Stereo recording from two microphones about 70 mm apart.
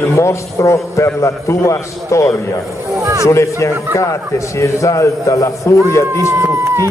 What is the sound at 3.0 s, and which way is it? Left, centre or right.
Speech, right.